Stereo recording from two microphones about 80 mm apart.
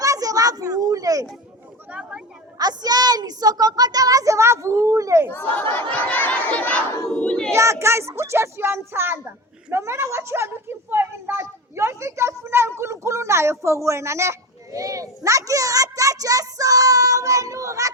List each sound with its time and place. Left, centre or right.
0.0 s a sound: right
1.9 s a sound: centre
2.6 s speech: right
5.5 s chatter: left
7.1 s crowd: centre
7.5 s speech: right